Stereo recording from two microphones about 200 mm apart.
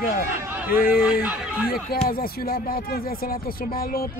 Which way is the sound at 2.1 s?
50° left (ahead or behind).